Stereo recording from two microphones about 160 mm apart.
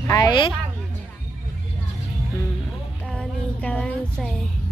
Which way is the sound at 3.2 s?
5° left (ahead or behind).